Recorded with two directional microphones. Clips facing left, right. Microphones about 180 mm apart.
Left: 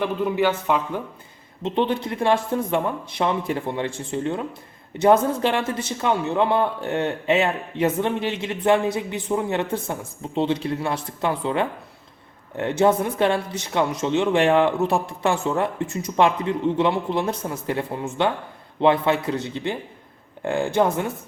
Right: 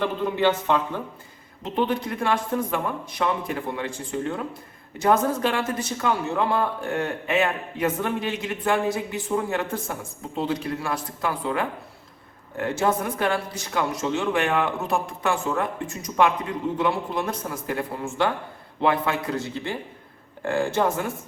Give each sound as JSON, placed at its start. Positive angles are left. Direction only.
{"t": 0.0, "sound": "a man's voice", "side_deg": 10}
{"t": 1.6, "sound": "a man's voice", "side_deg": 25}